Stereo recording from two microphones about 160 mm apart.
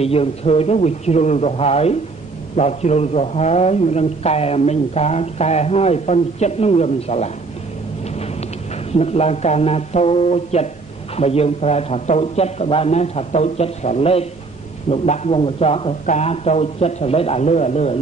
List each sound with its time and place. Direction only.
0.0 s a man's voice: 40° left (ahead or behind)
8.9 s speech: 40° left (ahead or behind)